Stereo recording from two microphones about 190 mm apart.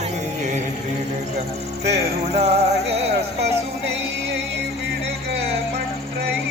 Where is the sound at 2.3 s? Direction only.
35° right (ahead or behind).